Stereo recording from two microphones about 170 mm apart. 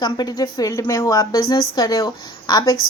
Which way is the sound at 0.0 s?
25° left (ahead or behind).